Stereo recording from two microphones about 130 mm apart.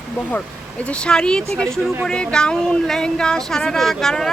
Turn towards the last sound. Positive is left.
turn(degrees=5)  # may be behind; listen again after turning